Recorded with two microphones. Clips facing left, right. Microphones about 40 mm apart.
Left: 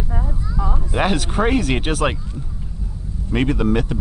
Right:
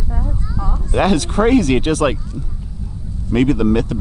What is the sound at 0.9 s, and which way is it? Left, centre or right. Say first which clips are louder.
Speech: right 4 dB; centre.